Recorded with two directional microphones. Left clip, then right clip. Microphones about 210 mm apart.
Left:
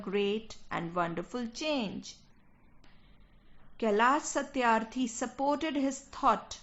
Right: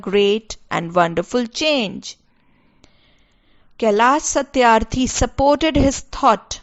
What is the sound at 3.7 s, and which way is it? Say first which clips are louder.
A woman's voice: right 12 dB; 45° right (ahead or behind).